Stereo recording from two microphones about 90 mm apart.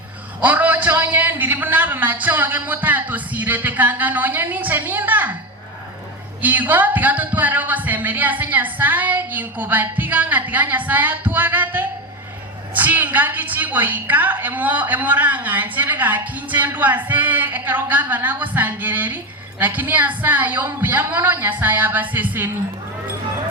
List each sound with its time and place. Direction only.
0.4 s a woman's voice: 20° right (ahead or behind)
6.4 s a woman's voice: 20° right (ahead or behind)